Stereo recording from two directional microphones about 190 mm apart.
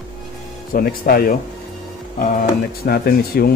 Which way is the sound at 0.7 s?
50° left (ahead or behind).